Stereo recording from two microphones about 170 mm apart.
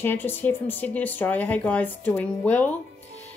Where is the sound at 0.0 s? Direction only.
10° left (ahead or behind).